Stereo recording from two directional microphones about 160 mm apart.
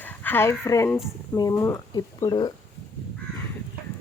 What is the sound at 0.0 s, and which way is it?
Speech, 10° left (ahead or behind).